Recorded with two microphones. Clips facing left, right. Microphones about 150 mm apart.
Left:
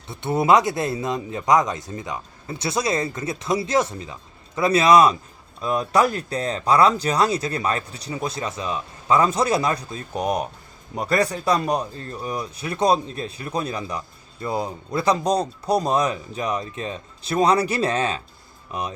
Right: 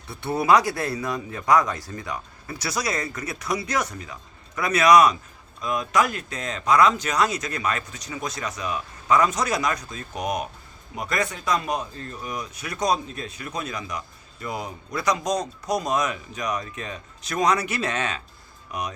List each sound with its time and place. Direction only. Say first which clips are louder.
0.1 s speech: left 2 dB; 20° left (ahead or behind)